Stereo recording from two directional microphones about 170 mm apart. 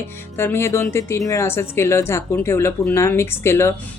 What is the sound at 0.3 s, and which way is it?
Speech, 15° left (ahead or behind).